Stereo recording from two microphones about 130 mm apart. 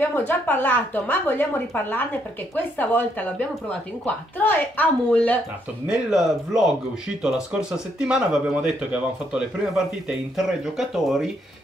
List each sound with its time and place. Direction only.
0.0 s speech: 15° left (ahead or behind)
5.9 s speech: 5° right (ahead or behind)